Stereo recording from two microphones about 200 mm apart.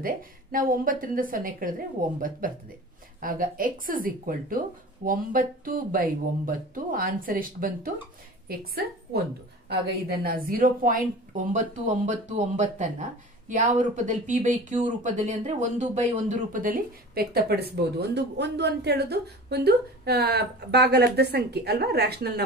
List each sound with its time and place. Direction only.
0.0 s speech: 45° right (ahead or behind)